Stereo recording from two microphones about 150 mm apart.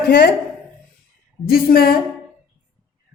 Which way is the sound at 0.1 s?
90° left.